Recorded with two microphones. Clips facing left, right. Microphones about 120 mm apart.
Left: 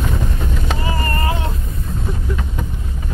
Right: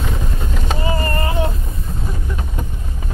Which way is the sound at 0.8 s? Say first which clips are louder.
Right 4 dB; 25° right (ahead or behind).